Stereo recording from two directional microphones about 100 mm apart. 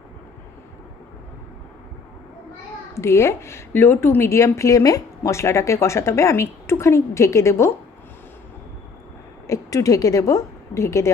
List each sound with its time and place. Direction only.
2.9 s a woman's voice: 30° left (ahead or behind)
9.5 s a woman's voice: 30° left (ahead or behind)